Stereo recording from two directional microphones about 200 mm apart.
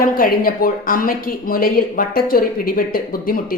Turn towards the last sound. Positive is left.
turn(degrees=45)  # may be behind; listen again after turning